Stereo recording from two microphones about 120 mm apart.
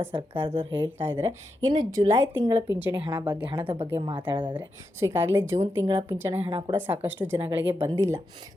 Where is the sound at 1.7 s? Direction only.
30° right (ahead or behind).